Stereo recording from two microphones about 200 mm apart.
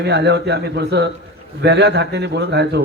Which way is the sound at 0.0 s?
60° right (ahead or behind).